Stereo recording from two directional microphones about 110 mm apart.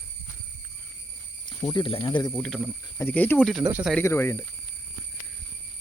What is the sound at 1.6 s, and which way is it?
Speech, 35° left (ahead or behind).